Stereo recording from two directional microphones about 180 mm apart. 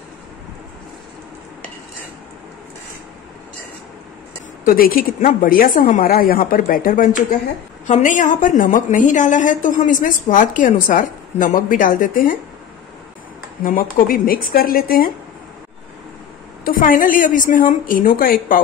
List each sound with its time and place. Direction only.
4.6 s a woman's voice: 55° left (ahead or behind)
13.7 s a woman's voice: 50° left (ahead or behind)
16.6 s a woman's voice: 50° left (ahead or behind)